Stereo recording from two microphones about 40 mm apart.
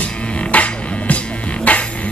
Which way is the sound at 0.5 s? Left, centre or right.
Left.